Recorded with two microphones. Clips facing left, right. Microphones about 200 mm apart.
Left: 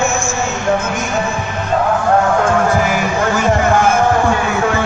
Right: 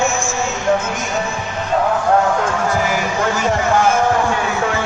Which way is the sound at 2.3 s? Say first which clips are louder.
Left 5 dB; 55° left (ahead or behind).